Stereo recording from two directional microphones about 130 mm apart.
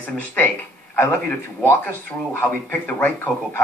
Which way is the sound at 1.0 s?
15° left (ahead or behind).